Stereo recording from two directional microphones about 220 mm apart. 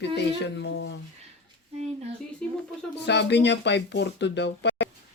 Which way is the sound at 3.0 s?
50° left (ahead or behind).